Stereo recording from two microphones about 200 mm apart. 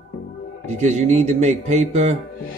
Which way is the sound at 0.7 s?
35° right (ahead or behind).